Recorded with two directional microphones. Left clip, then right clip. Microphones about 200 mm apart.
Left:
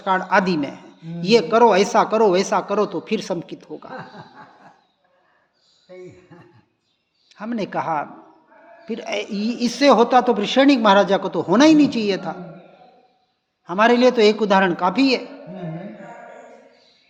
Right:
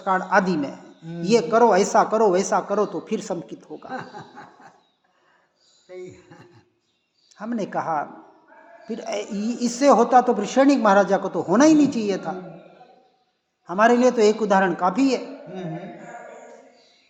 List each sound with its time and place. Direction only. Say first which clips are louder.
0.0 s a man's voice: left 2 dB; 30° left (ahead or behind)
3.8 s speech: right 2 dB; 30° right (ahead or behind)
5.9 s a sound: right 1 dB; 30° right (ahead or behind)
7.3 s speech: left 2 dB; 30° left (ahead or behind)
13.7 s speech: left 2 dB; 30° left (ahead or behind)